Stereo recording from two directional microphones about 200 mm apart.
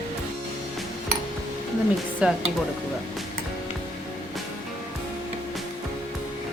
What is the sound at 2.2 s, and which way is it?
Speech, 5° right (ahead or behind).